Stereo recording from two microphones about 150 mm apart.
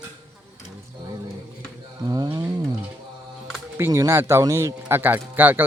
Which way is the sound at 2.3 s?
15° right (ahead or behind).